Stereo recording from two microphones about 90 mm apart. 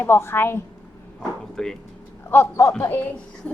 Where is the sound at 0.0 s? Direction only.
25° left (ahead or behind).